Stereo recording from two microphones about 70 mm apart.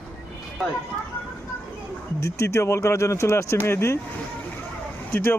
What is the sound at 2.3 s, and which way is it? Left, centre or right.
Speech, left.